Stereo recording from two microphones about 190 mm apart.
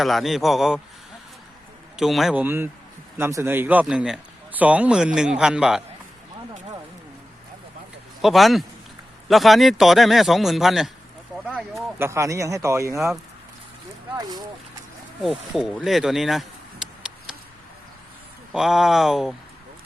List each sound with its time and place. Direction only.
0.0 s a man's voice: centre (ahead or behind)
2.0 s a man's voice: centre (ahead or behind)
8.2 s a man's voice: centre (ahead or behind); by 13.0 s 15° right (ahead or behind)
14.2 s speech: 20° right (ahead or behind)
15.2 s speech: centre (ahead or behind)
18.5 s a man's voice: centre (ahead or behind)